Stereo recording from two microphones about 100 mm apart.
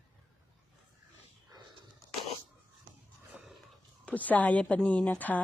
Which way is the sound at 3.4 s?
5° right (ahead or behind).